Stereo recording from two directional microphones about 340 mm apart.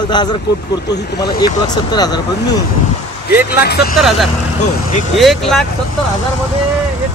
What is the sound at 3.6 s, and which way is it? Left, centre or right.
Speech, left.